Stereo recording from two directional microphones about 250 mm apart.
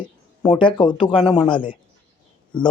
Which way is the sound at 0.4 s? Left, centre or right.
Centre.